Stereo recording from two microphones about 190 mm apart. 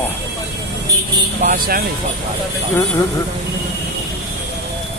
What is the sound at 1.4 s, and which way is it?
Speech, 50° right (ahead or behind).